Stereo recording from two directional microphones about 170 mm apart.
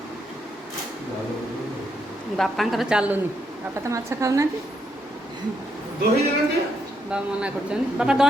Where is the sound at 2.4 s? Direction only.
Centre (ahead or behind).